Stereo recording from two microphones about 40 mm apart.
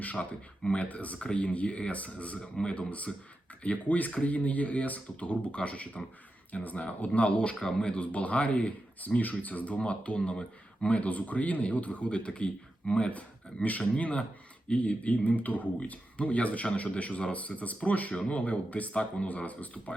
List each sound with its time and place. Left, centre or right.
0.0 s speech: left